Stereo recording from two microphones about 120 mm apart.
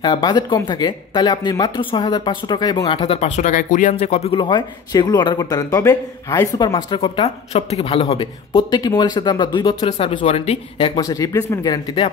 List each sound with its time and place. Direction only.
0.0 s speech: 40° left (ahead or behind)
1.8 s speech: 45° left (ahead or behind); by 4.4 s 60° left (ahead or behind)
4.4 s speech: 40° left (ahead or behind)
6.6 s speech: 40° left (ahead or behind)
7.2 s speech: 60° left (ahead or behind)
11.0 s speech: 30° left (ahead or behind)